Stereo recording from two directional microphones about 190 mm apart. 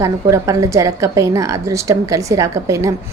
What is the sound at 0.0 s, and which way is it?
A woman's voice, 15° right (ahead or behind).